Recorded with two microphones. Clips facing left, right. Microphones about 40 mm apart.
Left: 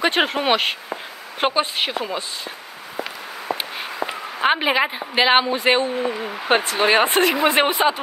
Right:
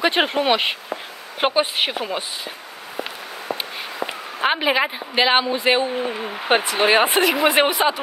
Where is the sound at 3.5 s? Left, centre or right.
Left.